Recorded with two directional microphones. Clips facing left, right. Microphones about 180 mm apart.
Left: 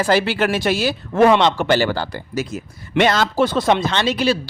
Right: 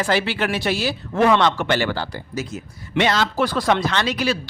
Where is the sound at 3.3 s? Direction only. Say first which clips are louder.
Left 3 dB; 25° left (ahead or behind).